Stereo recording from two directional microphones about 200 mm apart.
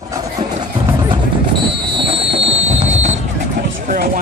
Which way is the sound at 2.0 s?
30° right (ahead or behind).